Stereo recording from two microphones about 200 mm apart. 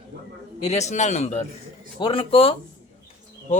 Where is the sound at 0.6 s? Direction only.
35° left (ahead or behind).